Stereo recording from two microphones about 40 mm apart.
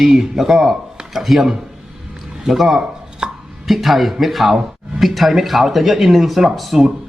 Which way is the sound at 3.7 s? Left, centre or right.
Centre.